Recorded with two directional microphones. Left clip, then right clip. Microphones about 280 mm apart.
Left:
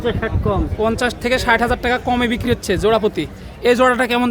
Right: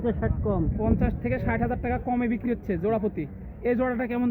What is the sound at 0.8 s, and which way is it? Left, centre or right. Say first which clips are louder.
Speech: left 10 dB; centre.